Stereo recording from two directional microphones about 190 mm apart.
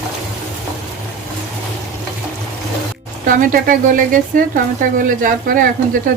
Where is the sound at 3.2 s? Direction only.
45° right (ahead or behind).